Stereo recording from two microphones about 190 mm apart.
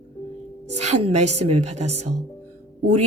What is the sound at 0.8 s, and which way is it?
Speech, 35° right (ahead or behind).